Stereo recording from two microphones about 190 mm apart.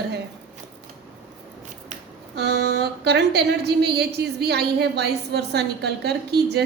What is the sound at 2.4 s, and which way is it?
A woman's voice, 60° right (ahead or behind).